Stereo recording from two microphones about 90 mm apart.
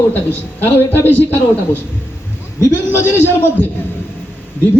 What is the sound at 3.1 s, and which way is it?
Speech, 25° left (ahead or behind).